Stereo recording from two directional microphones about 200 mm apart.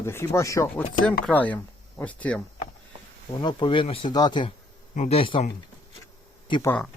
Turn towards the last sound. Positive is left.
turn(degrees=25)  # may be behind; listen again after turning